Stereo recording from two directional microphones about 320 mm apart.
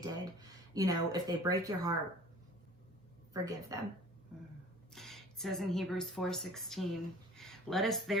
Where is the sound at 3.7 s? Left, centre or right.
Centre.